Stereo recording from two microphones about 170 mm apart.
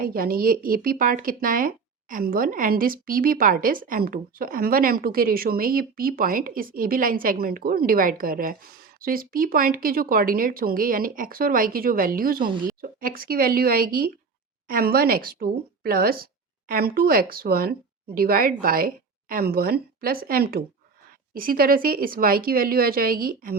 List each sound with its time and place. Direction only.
0.0 s a woman's voice: 60° right (ahead or behind)